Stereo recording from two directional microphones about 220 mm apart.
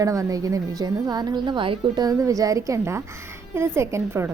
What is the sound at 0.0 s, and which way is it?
A woman's voice, 15° right (ahead or behind).